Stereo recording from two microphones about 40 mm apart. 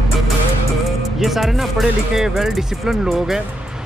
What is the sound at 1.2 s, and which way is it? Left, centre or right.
Speech, centre.